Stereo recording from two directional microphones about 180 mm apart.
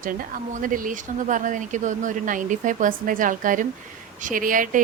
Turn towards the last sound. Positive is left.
turn(degrees=-50)  # may be behind; listen again after turning